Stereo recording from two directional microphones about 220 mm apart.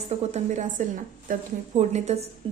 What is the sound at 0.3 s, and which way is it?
A woman's voice, 30° right (ahead or behind).